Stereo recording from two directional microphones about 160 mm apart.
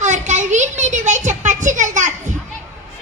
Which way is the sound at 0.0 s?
45° right (ahead or behind).